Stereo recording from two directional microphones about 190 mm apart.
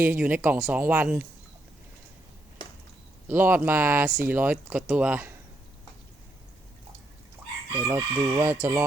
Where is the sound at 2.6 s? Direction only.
30° left (ahead or behind).